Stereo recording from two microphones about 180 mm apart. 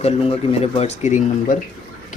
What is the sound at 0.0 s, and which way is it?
Speech, 35° left (ahead or behind).